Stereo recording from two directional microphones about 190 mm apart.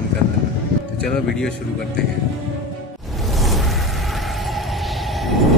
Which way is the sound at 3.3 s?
Centre (ahead or behind).